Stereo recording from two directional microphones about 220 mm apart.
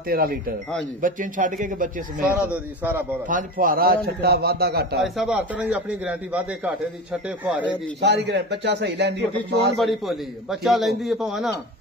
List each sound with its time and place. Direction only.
0.1 s a man's voice: 40° right (ahead or behind)
2.4 s a man's voice: 5° right (ahead or behind)
3.3 s a man's voice: 35° right (ahead or behind)
4.9 s a man's voice: centre (ahead or behind)
8.0 s a man's voice: 50° right (ahead or behind)
9.8 s a man's voice: centre (ahead or behind)